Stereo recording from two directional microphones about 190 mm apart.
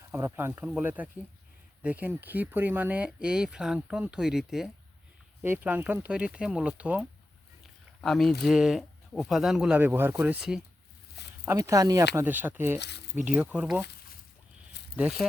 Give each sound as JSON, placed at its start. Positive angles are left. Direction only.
{"t": 0.1, "sound": "speech", "side_deg": -10}
{"t": 8.0, "sound": "speech", "side_deg": 0}
{"t": 11.4, "sound": "speech", "side_deg": -15}
{"t": 14.9, "sound": "speech", "side_deg": -5}